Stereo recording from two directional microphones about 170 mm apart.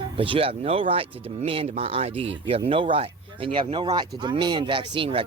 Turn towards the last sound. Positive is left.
turn(degrees=-30)  # may be behind; listen again after turning